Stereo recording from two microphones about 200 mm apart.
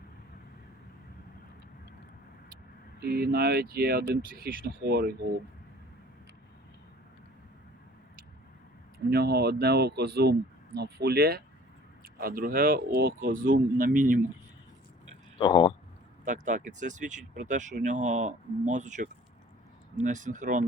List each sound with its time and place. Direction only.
3.0 s speech: 50° right (ahead or behind)
9.0 s speech: 50° right (ahead or behind)
15.4 s speech: 25° left (ahead or behind)
16.2 s speech: 40° right (ahead or behind)